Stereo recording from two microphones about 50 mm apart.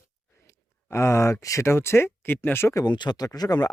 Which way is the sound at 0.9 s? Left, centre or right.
Left.